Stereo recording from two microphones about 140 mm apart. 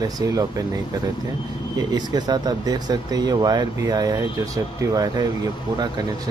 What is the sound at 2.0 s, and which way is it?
Speech, 30° right (ahead or behind).